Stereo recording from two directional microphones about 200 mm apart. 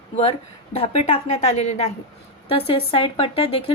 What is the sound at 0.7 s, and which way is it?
Speech, 30° left (ahead or behind).